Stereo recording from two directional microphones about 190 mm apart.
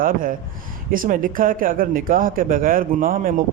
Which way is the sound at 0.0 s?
45° right (ahead or behind).